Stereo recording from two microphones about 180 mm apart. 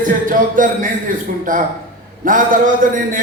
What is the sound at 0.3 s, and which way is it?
A man's voice, 50° right (ahead or behind).